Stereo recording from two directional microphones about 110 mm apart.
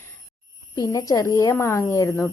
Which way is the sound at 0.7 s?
30° left (ahead or behind).